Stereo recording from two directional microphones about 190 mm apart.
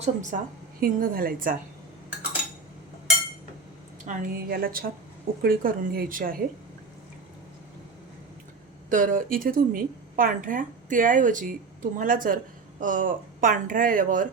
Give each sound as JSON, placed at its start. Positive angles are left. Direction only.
{"t": 0.0, "sound": "a woman's voice", "side_deg": -40}
{"t": 4.0, "sound": "speech", "side_deg": -50}
{"t": 8.9, "sound": "speech", "side_deg": -45}